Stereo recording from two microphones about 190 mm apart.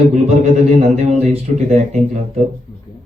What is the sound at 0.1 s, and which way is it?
A man's voice, 35° right (ahead or behind).